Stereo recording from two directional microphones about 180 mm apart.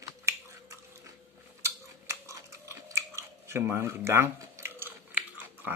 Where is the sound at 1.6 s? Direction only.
15° right (ahead or behind).